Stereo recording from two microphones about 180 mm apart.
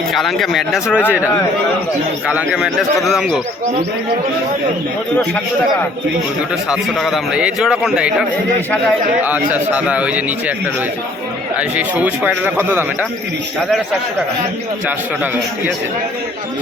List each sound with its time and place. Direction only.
0.1 s a man's voice: centre (ahead or behind)
1.0 s a man's voice: 15° left (ahead or behind)
2.2 s a man's voice: 5° right (ahead or behind)
6.7 s a man's voice: centre (ahead or behind)
9.2 s speech: 10° right (ahead or behind)
11.8 s speech: 10° right (ahead or behind)